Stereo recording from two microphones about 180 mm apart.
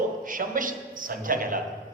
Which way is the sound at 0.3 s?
50° right (ahead or behind).